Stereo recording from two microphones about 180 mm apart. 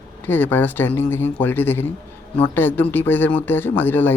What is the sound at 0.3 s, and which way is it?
Speech, 10° left (ahead or behind).